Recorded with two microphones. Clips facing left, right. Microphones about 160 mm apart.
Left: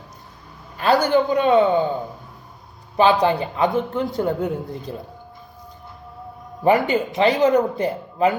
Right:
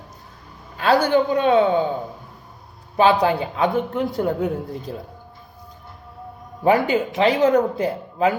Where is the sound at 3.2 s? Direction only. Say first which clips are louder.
Even; 5° right (ahead or behind).